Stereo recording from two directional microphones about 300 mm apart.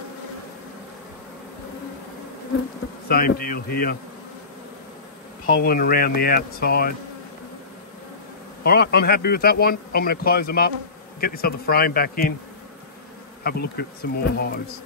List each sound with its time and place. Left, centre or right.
3.1 s speech: left
5.5 s speech: left
8.6 s speech: left
13.4 s speech: left